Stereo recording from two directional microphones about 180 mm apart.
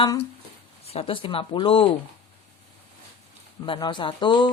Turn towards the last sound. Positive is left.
turn(degrees=25)  # may be behind; listen again after turning